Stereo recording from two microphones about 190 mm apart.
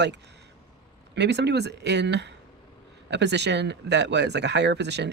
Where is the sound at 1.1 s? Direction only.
65° right (ahead or behind).